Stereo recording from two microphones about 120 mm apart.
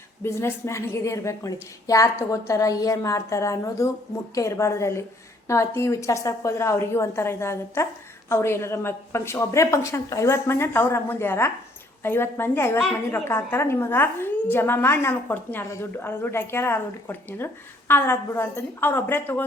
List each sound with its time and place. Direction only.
0.2 s a woman's voice: 20° left (ahead or behind)